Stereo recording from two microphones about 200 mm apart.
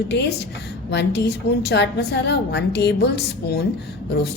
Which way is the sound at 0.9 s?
60° left (ahead or behind).